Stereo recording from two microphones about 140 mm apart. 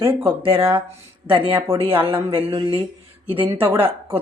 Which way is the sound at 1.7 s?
40° right (ahead or behind).